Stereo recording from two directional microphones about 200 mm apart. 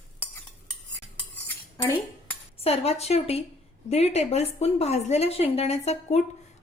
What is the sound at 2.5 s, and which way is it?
A woman's voice, 30° left (ahead or behind).